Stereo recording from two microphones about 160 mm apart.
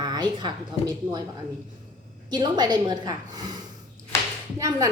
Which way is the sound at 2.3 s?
25° right (ahead or behind).